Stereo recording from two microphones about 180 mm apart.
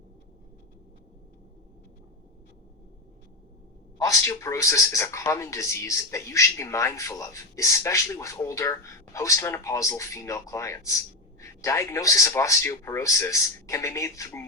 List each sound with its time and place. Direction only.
3.9 s a man's voice: 15° left (ahead or behind)